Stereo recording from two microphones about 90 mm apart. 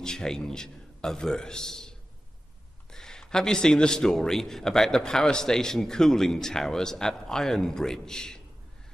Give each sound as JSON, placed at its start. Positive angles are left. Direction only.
{"t": 0.0, "sound": "a man's voice", "side_deg": 5}